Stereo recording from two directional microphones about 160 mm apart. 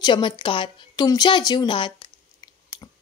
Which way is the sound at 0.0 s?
30° left (ahead or behind).